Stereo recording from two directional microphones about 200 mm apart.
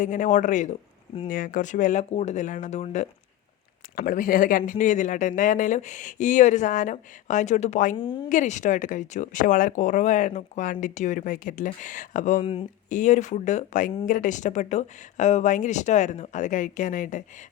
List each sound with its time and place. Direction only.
0.0 s speech: 40° left (ahead or behind)
7.9 s speech: 25° left (ahead or behind)
8.3 s speech: 40° left (ahead or behind)